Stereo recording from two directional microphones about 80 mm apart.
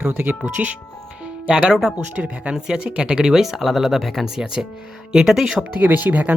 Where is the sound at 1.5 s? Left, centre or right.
Centre.